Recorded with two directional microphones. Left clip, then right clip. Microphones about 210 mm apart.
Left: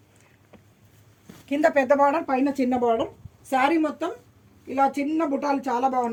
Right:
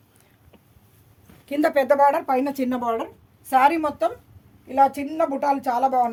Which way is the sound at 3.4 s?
35° right (ahead or behind).